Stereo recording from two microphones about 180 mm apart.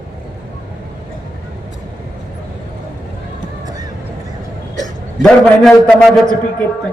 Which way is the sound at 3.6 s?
20° right (ahead or behind).